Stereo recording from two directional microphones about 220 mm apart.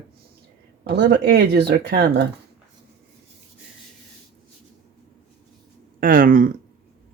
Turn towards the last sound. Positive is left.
turn(degrees=-40)  # may be behind; listen again after turning